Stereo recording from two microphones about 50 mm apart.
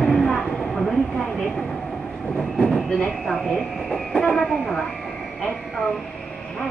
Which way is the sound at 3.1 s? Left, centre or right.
Centre.